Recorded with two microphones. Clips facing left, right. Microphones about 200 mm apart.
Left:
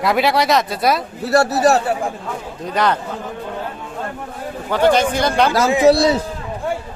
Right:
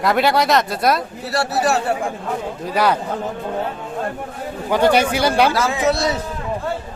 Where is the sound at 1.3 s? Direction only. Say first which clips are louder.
Left 5 dB; 40° left (ahead or behind).